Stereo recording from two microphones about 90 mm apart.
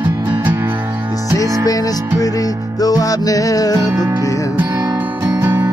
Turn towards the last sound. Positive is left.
turn(degrees=-30)  # may be behind; listen again after turning